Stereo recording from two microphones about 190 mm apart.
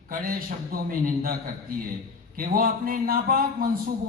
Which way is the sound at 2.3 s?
50° right (ahead or behind).